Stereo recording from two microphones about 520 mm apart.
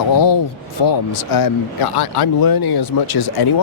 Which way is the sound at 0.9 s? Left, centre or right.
Left.